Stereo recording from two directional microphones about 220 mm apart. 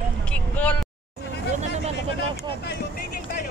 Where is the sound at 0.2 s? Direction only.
5° left (ahead or behind).